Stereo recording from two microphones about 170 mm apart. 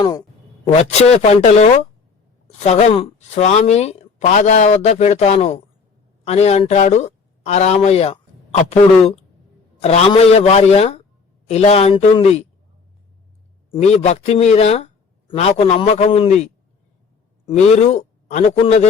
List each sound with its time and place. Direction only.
0.0 s speech: 25° left (ahead or behind)
13.7 s speech: 40° left (ahead or behind)
17.5 s speech: 45° left (ahead or behind)